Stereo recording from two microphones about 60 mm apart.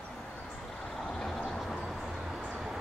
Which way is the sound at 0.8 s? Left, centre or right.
Centre.